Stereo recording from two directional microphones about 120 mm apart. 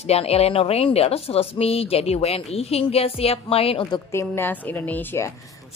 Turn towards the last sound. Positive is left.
turn(degrees=20)  # may be behind; listen again after turning